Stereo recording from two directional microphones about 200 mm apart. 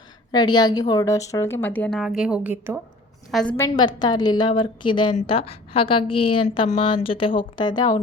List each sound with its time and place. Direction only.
0.3 s a woman's voice: 20° left (ahead or behind); by 2.8 s 10° right (ahead or behind)
3.3 s a woman's voice: 5° left (ahead or behind)
3.8 s a woman's voice: 20° left (ahead or behind)